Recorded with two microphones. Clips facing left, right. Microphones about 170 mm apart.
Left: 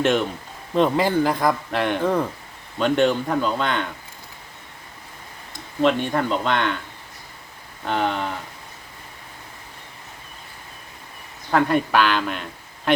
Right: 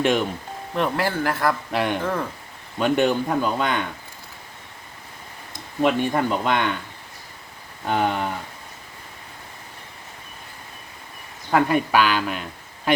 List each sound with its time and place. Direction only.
0.0 s speech: centre (ahead or behind)
0.8 s a man's voice: 15° left (ahead or behind)
1.7 s speech: 5° right (ahead or behind)
5.8 s speech: 10° right (ahead or behind)
7.9 s speech: 10° right (ahead or behind)
11.5 s speech: 5° right (ahead or behind)